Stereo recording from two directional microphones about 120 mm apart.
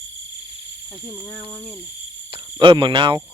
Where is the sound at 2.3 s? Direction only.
40° right (ahead or behind).